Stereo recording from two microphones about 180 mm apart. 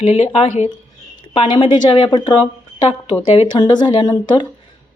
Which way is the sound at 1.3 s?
25° left (ahead or behind).